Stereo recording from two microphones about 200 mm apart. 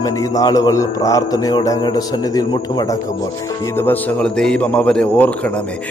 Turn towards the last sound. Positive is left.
turn(degrees=5)  # may be behind; listen again after turning